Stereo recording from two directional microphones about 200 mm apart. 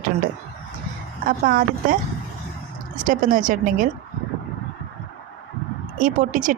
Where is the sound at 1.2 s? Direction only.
45° right (ahead or behind).